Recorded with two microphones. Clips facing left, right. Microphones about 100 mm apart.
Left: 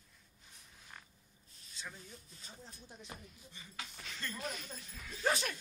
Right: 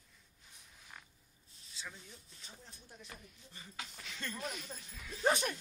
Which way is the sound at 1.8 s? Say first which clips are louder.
Left 1 dB; 5° left (ahead or behind).